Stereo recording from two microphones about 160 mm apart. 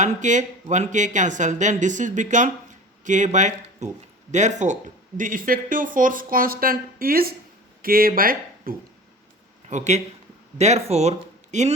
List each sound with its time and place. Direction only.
0.0 s speech: 50° right (ahead or behind)
9.6 s speech: 45° right (ahead or behind)